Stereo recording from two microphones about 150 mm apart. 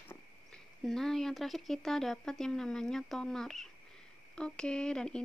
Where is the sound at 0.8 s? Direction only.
Centre (ahead or behind).